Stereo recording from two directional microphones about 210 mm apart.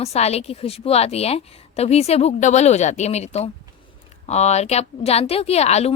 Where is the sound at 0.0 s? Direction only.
30° left (ahead or behind).